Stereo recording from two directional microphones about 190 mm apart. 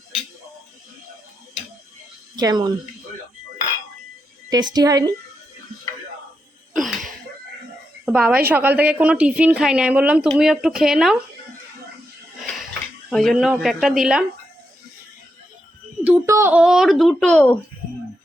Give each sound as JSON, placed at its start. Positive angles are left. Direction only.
{"t": 2.3, "sound": "a woman's voice", "side_deg": -20}
{"t": 4.4, "sound": "a woman's voice", "side_deg": -20}
{"t": 6.7, "sound": "a sound", "side_deg": 0}
{"t": 8.0, "sound": "a woman's voice", "side_deg": -5}
{"t": 12.4, "sound": "dishes", "side_deg": 0}
{"t": 13.1, "sound": "speech", "side_deg": 0}
{"t": 16.0, "sound": "a sound", "side_deg": -10}